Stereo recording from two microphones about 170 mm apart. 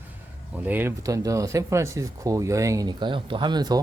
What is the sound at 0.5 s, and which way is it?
Speech, 10° right (ahead or behind).